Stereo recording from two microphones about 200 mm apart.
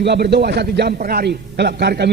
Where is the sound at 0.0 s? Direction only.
55° right (ahead or behind).